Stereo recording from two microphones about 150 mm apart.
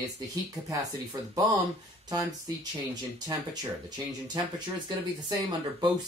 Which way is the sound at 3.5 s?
25° right (ahead or behind).